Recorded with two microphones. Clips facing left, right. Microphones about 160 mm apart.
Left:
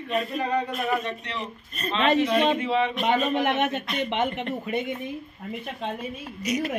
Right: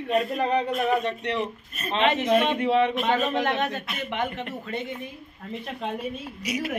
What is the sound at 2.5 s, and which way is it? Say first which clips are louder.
Speech: right 3 dB; 60° right (ahead or behind).